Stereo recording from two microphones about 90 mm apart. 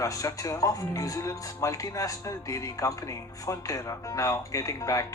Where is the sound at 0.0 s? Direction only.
35° left (ahead or behind).